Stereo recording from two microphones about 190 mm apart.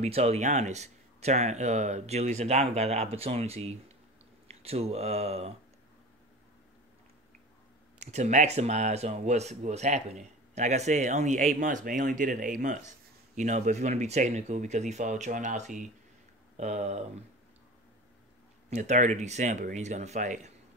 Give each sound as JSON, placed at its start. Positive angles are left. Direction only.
{"t": 0.0, "sound": "speech", "side_deg": -35}
{"t": 8.0, "sound": "speech", "side_deg": -35}
{"t": 18.7, "sound": "speech", "side_deg": -40}